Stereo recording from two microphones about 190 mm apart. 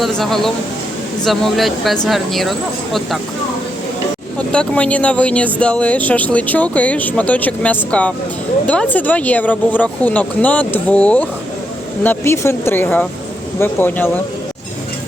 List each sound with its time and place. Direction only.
0.0 s speech: centre (ahead or behind)
4.4 s speech: 5° left (ahead or behind)